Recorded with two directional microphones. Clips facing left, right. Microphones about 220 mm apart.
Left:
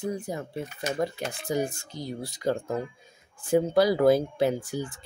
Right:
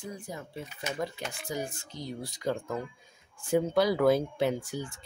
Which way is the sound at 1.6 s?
10° left (ahead or behind).